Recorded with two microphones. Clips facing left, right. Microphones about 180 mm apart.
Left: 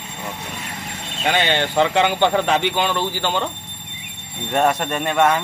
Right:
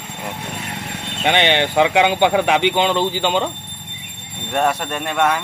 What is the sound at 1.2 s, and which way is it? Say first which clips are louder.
A man's voice: right 3 dB; 20° right (ahead or behind).